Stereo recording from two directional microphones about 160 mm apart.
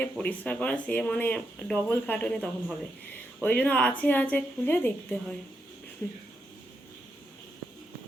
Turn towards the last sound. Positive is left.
turn(degrees=10)  # may be behind; listen again after turning